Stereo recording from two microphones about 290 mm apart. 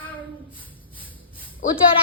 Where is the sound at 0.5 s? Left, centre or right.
Centre.